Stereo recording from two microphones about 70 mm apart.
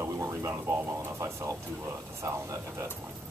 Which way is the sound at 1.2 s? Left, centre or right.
Right.